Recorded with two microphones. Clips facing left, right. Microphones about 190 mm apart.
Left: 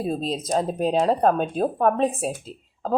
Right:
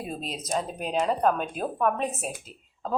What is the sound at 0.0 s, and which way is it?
A woman's voice, 30° left (ahead or behind).